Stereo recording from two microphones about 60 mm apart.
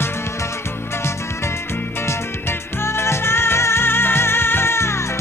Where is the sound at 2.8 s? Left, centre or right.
Left.